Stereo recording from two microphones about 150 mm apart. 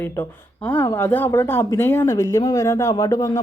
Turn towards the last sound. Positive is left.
turn(degrees=25)  # may be behind; listen again after turning